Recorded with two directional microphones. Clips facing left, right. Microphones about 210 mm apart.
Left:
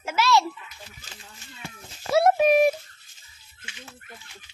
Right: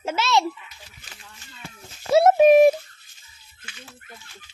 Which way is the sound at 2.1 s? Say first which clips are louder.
Right 5 dB; 25° right (ahead or behind).